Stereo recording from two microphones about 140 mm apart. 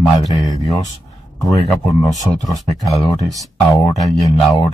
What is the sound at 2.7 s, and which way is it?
Speech, centre (ahead or behind).